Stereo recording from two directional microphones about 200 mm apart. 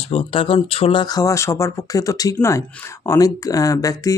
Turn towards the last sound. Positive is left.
turn(degrees=15)  # may be behind; listen again after turning